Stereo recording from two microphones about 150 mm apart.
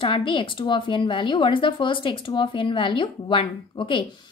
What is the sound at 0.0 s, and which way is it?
A woman's voice, 35° left (ahead or behind).